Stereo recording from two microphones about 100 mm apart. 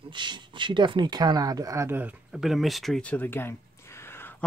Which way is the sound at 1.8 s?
20° right (ahead or behind).